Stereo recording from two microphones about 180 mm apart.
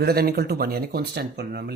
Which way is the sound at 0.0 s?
60° right (ahead or behind).